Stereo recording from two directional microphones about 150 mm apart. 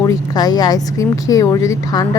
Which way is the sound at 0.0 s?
25° left (ahead or behind).